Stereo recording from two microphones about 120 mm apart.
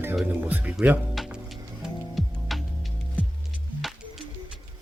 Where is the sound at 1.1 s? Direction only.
Centre (ahead or behind).